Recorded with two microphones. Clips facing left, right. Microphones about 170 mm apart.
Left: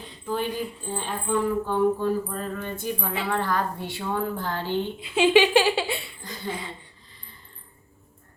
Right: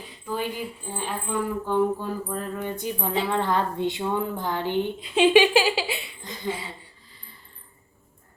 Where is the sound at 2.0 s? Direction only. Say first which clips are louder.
Left 4 dB; 10° right (ahead or behind).